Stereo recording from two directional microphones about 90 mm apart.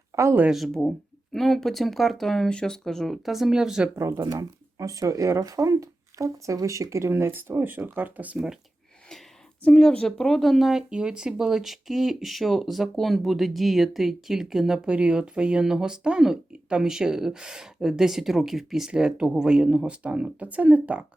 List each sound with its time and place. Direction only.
0.1 s a sound: 35° right (ahead or behind)
0.5 s speech: centre (ahead or behind)
3.9 s speech: 30° right (ahead or behind)
9.6 s speech: 10° left (ahead or behind); by 21.0 s 15° right (ahead or behind)